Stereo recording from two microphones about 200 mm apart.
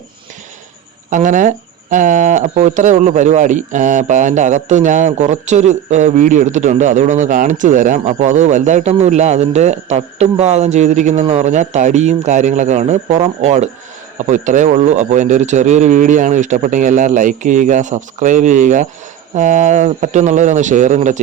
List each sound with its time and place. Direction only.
1.1 s speech: 40° right (ahead or behind)